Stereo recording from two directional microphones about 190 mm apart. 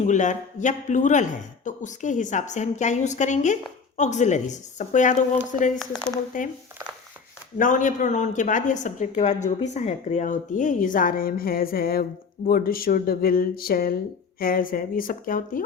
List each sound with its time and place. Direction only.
0.0 s a woman's voice: 40° left (ahead or behind)
7.6 s a woman's voice: 45° left (ahead or behind)